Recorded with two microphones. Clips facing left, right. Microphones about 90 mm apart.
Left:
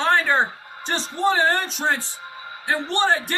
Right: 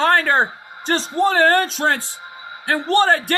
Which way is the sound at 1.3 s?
60° right (ahead or behind).